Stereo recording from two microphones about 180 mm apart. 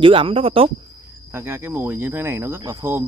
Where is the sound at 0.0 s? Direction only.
30° right (ahead or behind).